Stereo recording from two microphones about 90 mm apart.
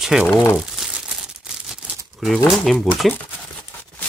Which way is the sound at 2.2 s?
Centre (ahead or behind).